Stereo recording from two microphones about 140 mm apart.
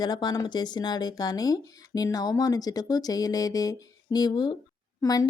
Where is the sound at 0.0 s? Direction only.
30° left (ahead or behind).